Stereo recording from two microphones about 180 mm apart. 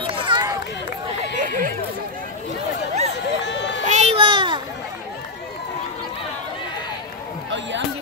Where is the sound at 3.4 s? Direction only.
80° left.